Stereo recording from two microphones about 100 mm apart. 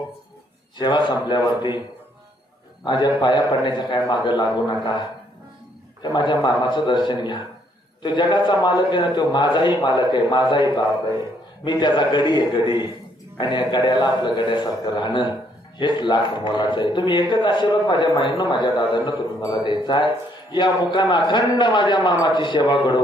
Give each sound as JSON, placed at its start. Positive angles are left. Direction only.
{"t": 0.8, "sound": "a man's voice", "side_deg": 50}
{"t": 2.8, "sound": "a man's voice", "side_deg": 50}
{"t": 6.0, "sound": "a man's voice", "side_deg": 50}